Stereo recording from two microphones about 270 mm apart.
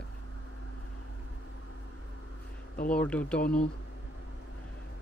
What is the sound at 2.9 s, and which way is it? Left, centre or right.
Speech, centre.